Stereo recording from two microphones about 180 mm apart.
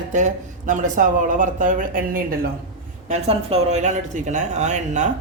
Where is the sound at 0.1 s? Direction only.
45° right (ahead or behind).